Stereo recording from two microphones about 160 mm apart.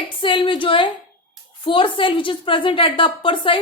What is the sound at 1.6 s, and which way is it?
A woman's voice, 30° left (ahead or behind).